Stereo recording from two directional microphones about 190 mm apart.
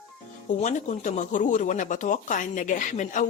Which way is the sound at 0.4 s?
40° left (ahead or behind).